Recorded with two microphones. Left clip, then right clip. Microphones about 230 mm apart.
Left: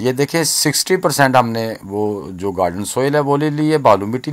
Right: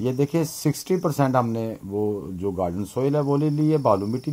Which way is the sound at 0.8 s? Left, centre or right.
Left.